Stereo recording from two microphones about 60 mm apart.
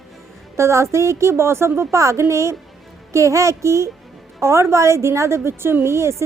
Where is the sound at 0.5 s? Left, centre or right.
Right.